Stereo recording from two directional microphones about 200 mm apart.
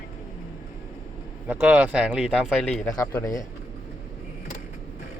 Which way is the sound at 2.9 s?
15° left (ahead or behind).